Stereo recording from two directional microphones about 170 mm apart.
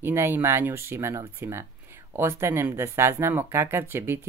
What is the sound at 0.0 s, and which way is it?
Speech, 15° right (ahead or behind).